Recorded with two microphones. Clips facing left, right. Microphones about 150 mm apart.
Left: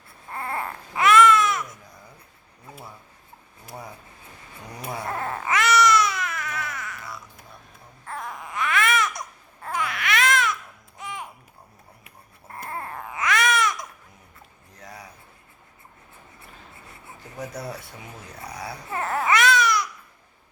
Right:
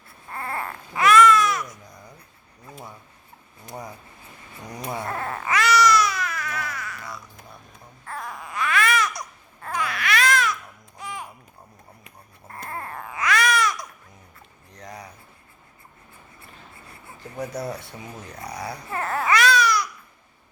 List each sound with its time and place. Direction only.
0.3 s baby cry: 20° left (ahead or behind)
5.0 s baby cry: 20° left (ahead or behind)
8.1 s baby cry: 20° left (ahead or behind)
9.6 s babbling: 20° left (ahead or behind)
12.6 s baby cry: 20° left (ahead or behind)
14.7 s a sound: 5° left (ahead or behind)
17.4 s speech: centre (ahead or behind)
18.9 s babbling: 20° left (ahead or behind)